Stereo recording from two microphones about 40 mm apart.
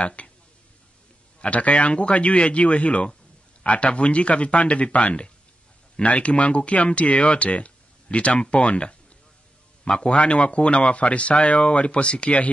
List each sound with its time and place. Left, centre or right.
0.0 s speech: left
1.4 s speech: left
6.0 s speech: left